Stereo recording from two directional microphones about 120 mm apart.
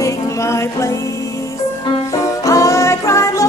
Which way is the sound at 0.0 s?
25° left (ahead or behind).